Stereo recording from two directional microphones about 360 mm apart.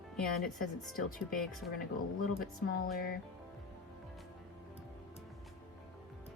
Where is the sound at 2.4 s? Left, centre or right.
Left.